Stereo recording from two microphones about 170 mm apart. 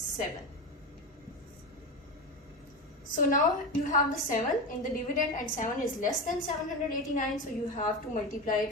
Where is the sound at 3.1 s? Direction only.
50° left (ahead or behind).